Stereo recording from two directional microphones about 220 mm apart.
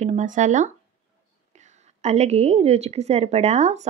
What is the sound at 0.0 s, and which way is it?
A woman's voice, 35° right (ahead or behind).